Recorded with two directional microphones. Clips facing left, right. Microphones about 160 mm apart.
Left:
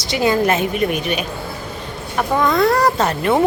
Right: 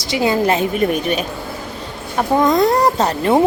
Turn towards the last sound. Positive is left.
turn(degrees=-20)  # may be behind; listen again after turning